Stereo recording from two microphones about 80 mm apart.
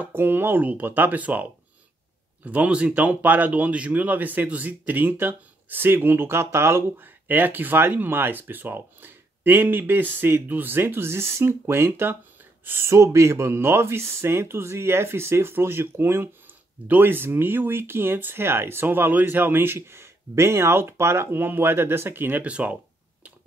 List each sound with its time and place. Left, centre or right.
0.0 s speech: right